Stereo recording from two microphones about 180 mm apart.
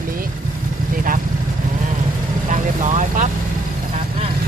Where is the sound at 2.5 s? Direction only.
45° right (ahead or behind).